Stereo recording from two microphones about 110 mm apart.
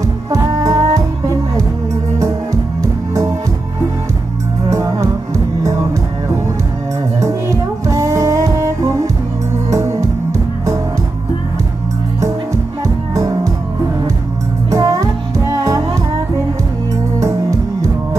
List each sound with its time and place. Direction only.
0.3 s music: 30° right (ahead or behind)
2.1 s music: 25° right (ahead or behind)
4.6 s music: 30° right (ahead or behind)
7.2 s music: 30° right (ahead or behind)
12.8 s music: 25° right (ahead or behind)
14.7 s music: 30° right (ahead or behind)
17.2 s music: 30° right (ahead or behind)